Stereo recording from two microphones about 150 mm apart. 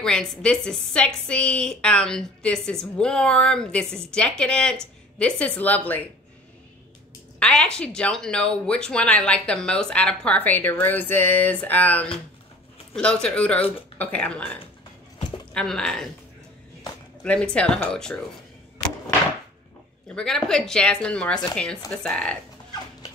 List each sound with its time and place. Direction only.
0.0 s a woman's voice: 5° left (ahead or behind)
7.3 s a woman's voice: 5° left (ahead or behind)
17.2 s speech: 5° left (ahead or behind)
20.2 s a woman's voice: 5° left (ahead or behind)